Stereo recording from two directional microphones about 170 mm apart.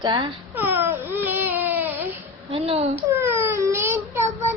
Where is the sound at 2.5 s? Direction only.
35° right (ahead or behind).